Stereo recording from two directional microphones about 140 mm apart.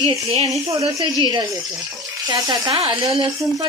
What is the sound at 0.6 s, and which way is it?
Speech, 40° right (ahead or behind).